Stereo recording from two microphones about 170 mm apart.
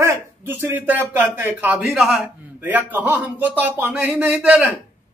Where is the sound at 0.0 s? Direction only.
15° right (ahead or behind).